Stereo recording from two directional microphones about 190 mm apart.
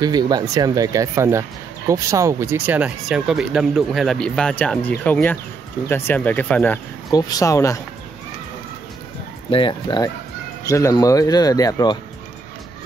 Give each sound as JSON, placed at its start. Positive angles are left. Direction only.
{"t": 0.0, "sound": "speech", "side_deg": -20}
{"t": 7.1, "sound": "speech", "side_deg": 20}
{"t": 9.5, "sound": "speech", "side_deg": 25}